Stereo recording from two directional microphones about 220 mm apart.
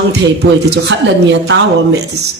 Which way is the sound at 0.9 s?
55° right (ahead or behind).